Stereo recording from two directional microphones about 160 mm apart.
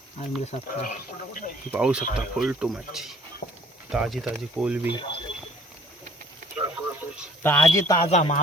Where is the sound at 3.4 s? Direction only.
55° left (ahead or behind).